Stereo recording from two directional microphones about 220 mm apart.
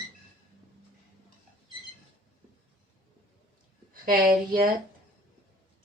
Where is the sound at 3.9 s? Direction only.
40° right (ahead or behind).